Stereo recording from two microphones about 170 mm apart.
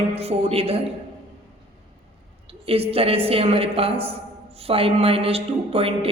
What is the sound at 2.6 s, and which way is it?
A woman's voice, 35° right (ahead or behind).